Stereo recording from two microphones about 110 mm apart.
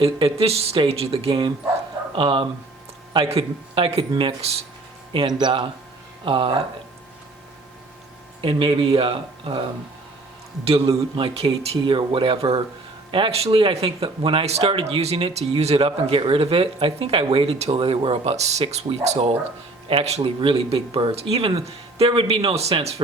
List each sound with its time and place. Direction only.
0.0 s speech: 60° right (ahead or behind)
4.4 s speech: 70° right (ahead or behind)
5.1 s speech: 45° right (ahead or behind)
8.4 s speech: 50° right (ahead or behind)
10.7 s speech: 65° right (ahead or behind)
14.7 s speech: 55° right (ahead or behind); by 23.0 s 70° right (ahead or behind)